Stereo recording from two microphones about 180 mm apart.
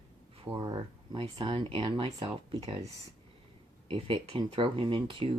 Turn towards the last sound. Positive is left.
turn(degrees=-30)  # may be behind; listen again after turning